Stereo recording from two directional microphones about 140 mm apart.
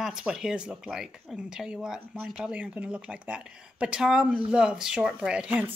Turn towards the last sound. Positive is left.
turn(degrees=-10)  # may be behind; listen again after turning